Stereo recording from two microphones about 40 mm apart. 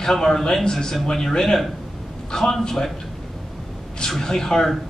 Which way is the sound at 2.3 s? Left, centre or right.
Centre.